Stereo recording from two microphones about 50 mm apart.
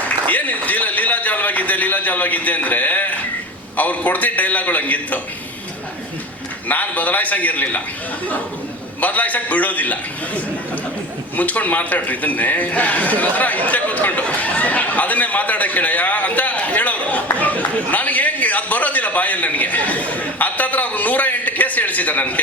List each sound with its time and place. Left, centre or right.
0.0 s a sound: left
3.8 s a man's voice: left
6.7 s a man's voice: left
9.0 s a man's voice: left